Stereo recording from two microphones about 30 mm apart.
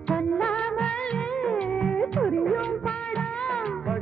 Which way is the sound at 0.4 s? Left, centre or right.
Left.